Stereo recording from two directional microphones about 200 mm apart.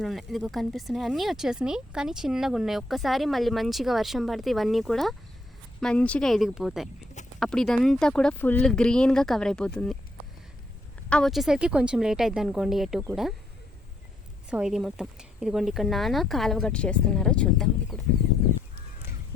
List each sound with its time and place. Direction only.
0.0 s speech: centre (ahead or behind)
11.1 s speech: centre (ahead or behind)
14.5 s speech: 5° right (ahead or behind)